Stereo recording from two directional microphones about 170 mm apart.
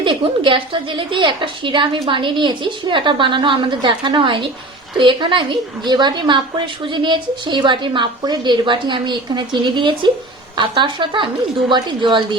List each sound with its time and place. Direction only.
0.0 s a woman's voice: 30° right (ahead or behind)